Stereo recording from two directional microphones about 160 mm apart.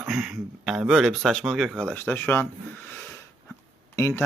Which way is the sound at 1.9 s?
10° left (ahead or behind).